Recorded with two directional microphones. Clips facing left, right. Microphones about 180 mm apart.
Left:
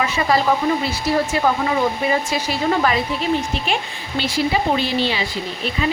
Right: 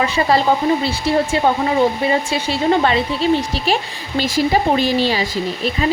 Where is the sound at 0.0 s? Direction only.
30° right (ahead or behind).